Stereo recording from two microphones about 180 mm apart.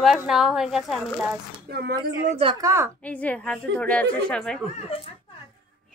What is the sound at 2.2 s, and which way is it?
Speech, 35° right (ahead or behind).